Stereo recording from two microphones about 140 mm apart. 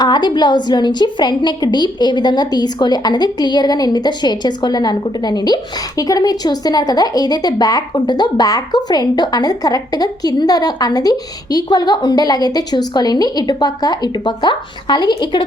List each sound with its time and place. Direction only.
0.0 s a woman's voice: 30° left (ahead or behind)